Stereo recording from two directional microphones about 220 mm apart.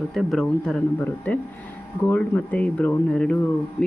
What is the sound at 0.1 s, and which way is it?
Speech, centre (ahead or behind).